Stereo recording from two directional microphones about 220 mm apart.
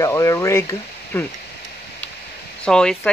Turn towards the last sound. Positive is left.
turn(degrees=5)  # may be behind; listen again after turning